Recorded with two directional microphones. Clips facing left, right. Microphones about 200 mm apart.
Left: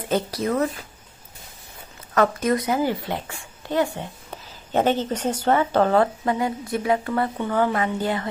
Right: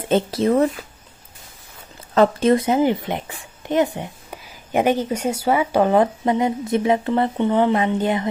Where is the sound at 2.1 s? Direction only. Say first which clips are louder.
Right 5 dB; 30° right (ahead or behind).